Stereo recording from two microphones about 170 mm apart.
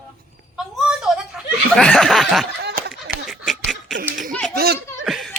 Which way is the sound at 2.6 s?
75° right (ahead or behind).